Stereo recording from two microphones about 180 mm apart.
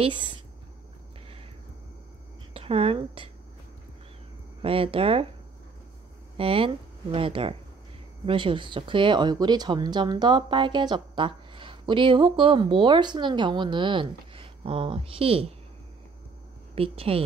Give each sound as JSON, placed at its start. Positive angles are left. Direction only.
{"t": 2.5, "sound": "a woman's voice", "side_deg": -30}
{"t": 4.6, "sound": "speech", "side_deg": -30}
{"t": 6.3, "sound": "speech", "side_deg": -30}
{"t": 16.7, "sound": "speech", "side_deg": -30}